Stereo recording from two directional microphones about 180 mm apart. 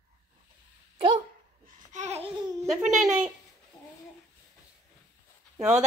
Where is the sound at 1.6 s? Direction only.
45° right (ahead or behind).